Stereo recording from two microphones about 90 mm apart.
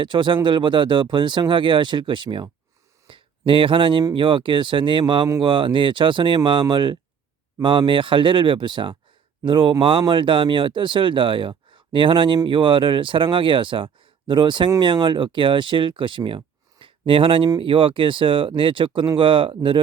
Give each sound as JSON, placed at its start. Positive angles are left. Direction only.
{"t": 0.0, "sound": "speech", "side_deg": -60}
{"t": 3.1, "sound": "a sound", "side_deg": -75}
{"t": 4.1, "sound": "speech", "side_deg": -70}